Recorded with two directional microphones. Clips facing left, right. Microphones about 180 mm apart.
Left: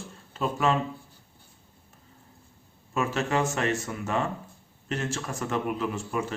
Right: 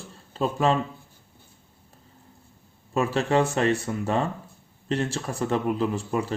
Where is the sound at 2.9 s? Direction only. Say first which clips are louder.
Right 4 dB; 35° right (ahead or behind).